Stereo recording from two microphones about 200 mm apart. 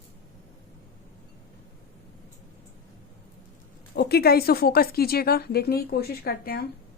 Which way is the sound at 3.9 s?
50° left (ahead or behind).